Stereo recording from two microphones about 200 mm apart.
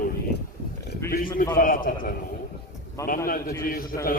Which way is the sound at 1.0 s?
45° left (ahead or behind).